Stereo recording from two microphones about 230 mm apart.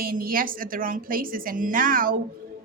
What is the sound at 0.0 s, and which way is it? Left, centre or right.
A man's voice, right.